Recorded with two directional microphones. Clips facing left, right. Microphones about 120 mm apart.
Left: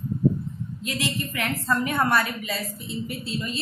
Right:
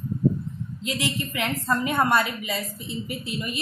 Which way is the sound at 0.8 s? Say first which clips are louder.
Right 1 dB; 20° right (ahead or behind).